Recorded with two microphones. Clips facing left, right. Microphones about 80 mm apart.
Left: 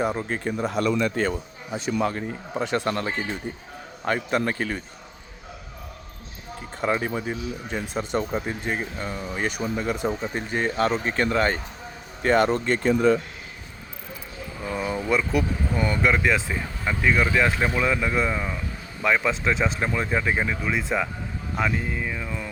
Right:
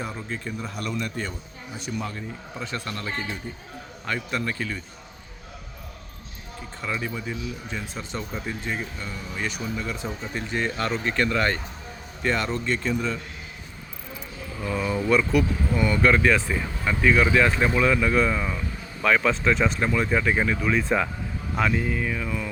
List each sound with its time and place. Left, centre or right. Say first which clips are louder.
0.0 s a man's voice: left 7 dB; left
4.0 s speech: left 5 dB; left
6.8 s speech: left 5 dB; left
10.1 s speech: left 3 dB; left
12.3 s speech: left 6 dB; left
14.7 s speech: right 2 dB; left
16.0 s speech: right 2 dB; centre